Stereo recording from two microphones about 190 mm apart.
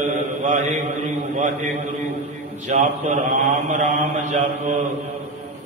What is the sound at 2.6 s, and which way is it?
A man's voice, 40° right (ahead or behind).